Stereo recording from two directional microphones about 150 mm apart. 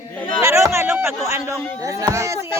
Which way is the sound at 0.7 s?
15° right (ahead or behind).